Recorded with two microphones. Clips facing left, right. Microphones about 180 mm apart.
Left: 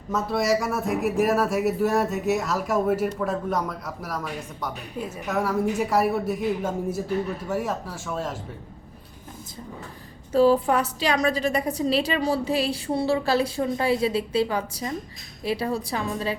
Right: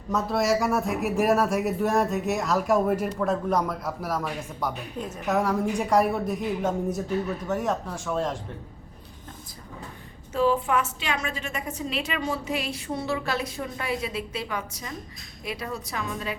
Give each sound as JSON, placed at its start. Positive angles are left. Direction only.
{"t": 0.1, "sound": "speech", "side_deg": 0}
{"t": 10.3, "sound": "a woman's voice", "side_deg": 35}